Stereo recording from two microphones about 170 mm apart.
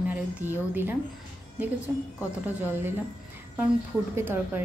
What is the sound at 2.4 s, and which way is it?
A woman's voice, 10° right (ahead or behind).